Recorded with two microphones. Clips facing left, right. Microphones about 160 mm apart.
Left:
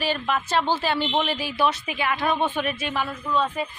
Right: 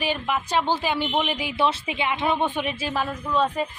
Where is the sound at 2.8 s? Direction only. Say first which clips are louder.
Right 1 dB; 35° right (ahead or behind).